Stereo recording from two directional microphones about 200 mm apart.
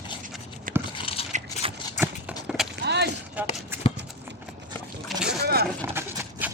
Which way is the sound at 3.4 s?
5° right (ahead or behind).